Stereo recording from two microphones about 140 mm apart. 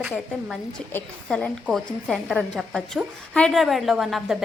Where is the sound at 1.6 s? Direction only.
Centre (ahead or behind).